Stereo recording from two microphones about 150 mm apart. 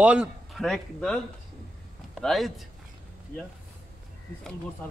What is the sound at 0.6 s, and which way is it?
A man's voice, 5° left (ahead or behind).